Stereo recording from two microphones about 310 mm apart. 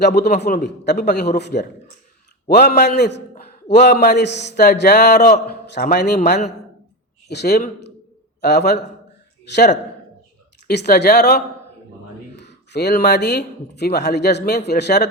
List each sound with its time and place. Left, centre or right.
0.0 s a man's voice: left
7.3 s a man's voice: left
10.7 s a man's voice: left